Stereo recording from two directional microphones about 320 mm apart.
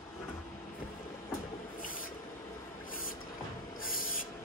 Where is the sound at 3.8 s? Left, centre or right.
Left.